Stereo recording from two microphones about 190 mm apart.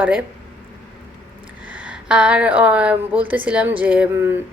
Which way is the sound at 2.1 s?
5° right (ahead or behind).